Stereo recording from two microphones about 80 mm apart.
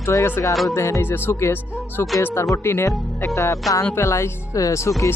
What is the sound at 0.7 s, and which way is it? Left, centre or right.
Speech, left.